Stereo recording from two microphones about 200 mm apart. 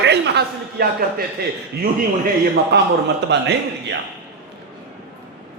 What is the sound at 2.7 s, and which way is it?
A man's voice, 55° right (ahead or behind).